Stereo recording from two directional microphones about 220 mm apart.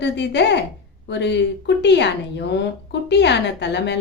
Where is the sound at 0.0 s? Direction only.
50° left (ahead or behind).